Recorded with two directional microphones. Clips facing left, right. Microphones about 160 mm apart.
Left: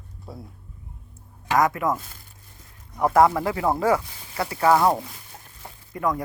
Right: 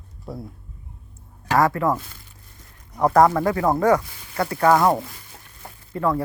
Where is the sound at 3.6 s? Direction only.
5° left (ahead or behind).